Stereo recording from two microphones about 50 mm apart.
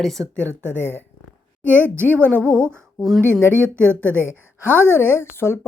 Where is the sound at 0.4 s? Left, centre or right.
Left.